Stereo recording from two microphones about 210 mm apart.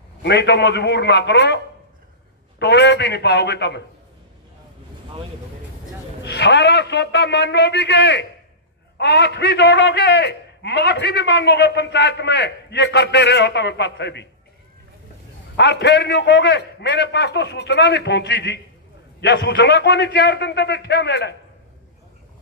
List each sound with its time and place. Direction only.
0.2 s a man's voice: 55° left (ahead or behind)
2.6 s a man's voice: 55° left (ahead or behind)
6.2 s a man's voice: 55° left (ahead or behind)
15.5 s a man's voice: 55° left (ahead or behind)